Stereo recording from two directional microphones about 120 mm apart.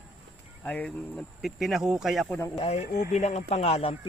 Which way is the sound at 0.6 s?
10° left (ahead or behind).